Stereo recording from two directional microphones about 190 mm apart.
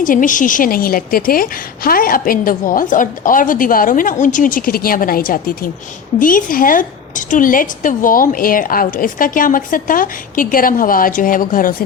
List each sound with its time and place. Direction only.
0.0 s a woman's voice: 45° left (ahead or behind)